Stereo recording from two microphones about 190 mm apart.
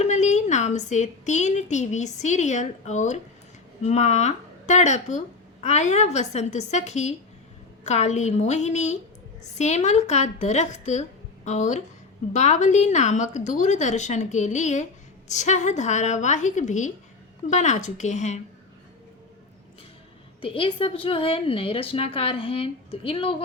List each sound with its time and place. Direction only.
0.0 s a woman's voice: 40° left (ahead or behind)
20.4 s a woman's voice: 30° left (ahead or behind)